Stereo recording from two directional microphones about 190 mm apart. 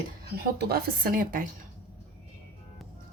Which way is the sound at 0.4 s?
55° right (ahead or behind).